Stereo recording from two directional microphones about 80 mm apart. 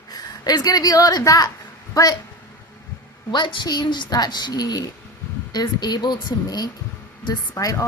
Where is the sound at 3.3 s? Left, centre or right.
Left.